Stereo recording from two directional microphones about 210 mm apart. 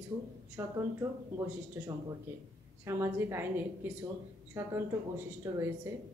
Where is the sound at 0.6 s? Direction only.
10° right (ahead or behind).